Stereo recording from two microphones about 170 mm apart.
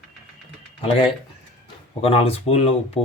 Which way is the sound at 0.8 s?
30° left (ahead or behind).